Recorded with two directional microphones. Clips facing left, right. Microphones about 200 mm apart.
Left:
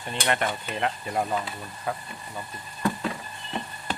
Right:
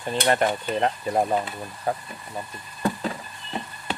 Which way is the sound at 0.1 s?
35° right (ahead or behind).